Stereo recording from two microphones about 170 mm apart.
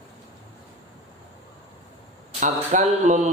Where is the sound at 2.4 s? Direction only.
45° right (ahead or behind).